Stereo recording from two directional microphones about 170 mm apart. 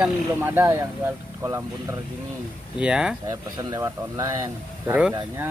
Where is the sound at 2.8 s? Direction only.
5° right (ahead or behind).